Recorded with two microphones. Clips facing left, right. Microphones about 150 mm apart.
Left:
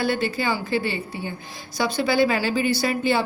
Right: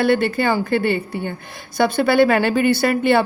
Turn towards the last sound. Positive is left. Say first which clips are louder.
# right 6 dB
turn(degrees=-60)  # may be behind; listen again after turning